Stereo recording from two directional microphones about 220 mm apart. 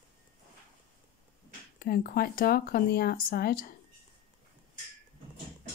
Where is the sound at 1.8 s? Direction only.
40° left (ahead or behind).